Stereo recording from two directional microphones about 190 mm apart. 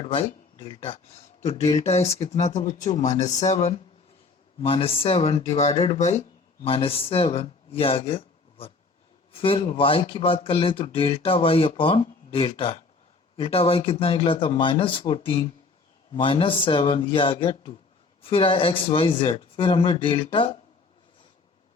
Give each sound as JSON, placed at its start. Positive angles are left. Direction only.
{"t": 0.0, "sound": "speech", "side_deg": 30}